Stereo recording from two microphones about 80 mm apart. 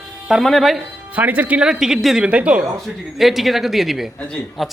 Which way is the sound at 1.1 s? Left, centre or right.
Centre.